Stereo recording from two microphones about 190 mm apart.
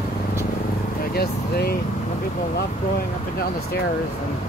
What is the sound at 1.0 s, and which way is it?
Speech, 55° left (ahead or behind).